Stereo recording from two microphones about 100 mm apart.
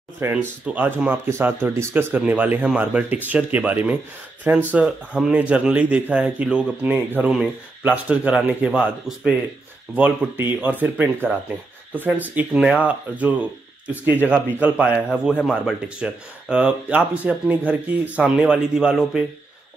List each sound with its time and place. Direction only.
0.3 s a man's voice: 15° right (ahead or behind)